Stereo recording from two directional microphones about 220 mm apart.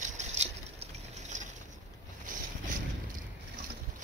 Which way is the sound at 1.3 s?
35° right (ahead or behind).